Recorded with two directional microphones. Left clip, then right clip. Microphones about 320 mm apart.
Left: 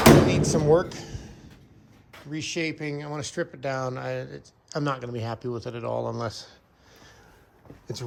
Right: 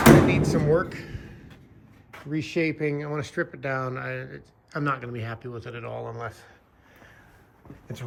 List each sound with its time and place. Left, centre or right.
0.0 s door: centre
2.1 s speech: centre